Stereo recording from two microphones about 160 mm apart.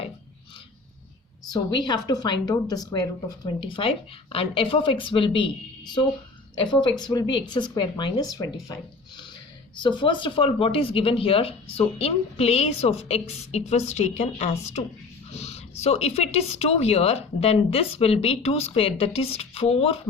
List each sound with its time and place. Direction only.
1.7 s speech: 25° left (ahead or behind)